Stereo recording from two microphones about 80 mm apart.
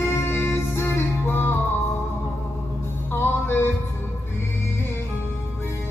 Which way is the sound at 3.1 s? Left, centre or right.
Left.